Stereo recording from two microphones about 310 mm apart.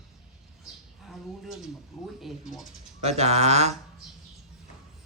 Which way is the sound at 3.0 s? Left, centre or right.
Centre.